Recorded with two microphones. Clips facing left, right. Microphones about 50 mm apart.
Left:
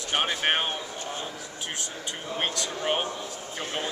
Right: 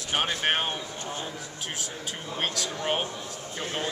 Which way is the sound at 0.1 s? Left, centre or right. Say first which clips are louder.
Left 1 dB; centre.